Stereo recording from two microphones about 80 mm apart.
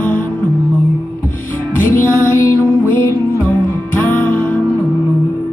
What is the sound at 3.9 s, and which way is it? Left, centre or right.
Music, left.